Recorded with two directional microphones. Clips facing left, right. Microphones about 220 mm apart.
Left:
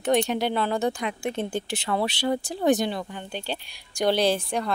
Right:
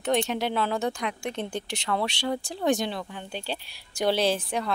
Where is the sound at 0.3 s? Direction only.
Centre (ahead or behind).